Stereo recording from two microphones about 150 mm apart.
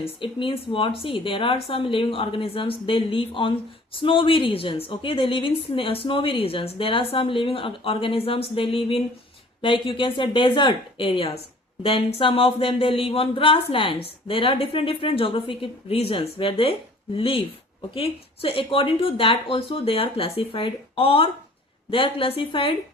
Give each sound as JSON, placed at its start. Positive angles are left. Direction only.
{"t": 0.0, "sound": "speech", "side_deg": 35}